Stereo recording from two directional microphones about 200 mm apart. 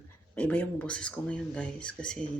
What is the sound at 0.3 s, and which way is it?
Speech, 5° left (ahead or behind).